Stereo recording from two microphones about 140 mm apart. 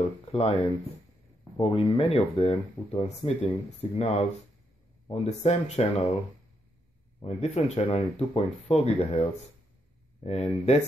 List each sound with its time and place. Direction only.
0.2 s speech: 45° left (ahead or behind)
1.6 s speech: 45° left (ahead or behind)
7.2 s speech: 50° left (ahead or behind)
10.2 s speech: 45° left (ahead or behind)